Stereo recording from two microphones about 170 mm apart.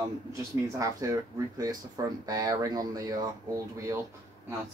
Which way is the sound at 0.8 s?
20° right (ahead or behind).